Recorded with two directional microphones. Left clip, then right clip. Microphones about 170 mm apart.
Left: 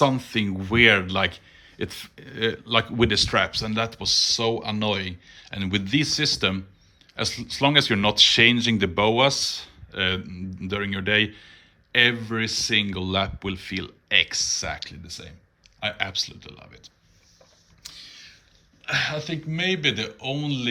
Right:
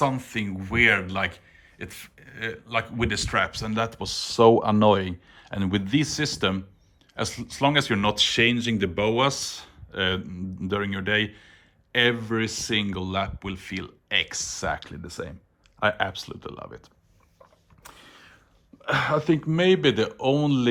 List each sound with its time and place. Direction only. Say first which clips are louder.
0.0 s speech: left 4 dB; 10° left (ahead or behind); by 16.6 s 15° right (ahead or behind)
19.2 s speech: right 5 dB; 20° right (ahead or behind)